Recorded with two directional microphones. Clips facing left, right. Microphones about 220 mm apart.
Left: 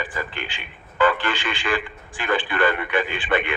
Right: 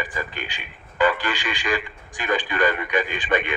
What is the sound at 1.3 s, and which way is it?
Speech, 40° right (ahead or behind).